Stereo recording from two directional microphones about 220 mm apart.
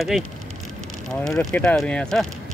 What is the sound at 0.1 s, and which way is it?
Speech, centre (ahead or behind).